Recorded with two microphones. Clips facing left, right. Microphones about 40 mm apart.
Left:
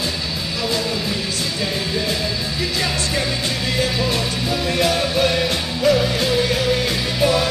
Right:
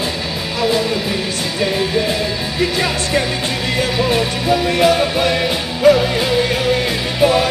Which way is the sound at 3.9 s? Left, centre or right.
Right.